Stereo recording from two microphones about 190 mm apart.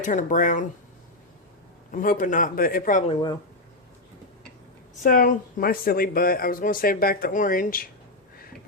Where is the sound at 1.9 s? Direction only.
45° left (ahead or behind).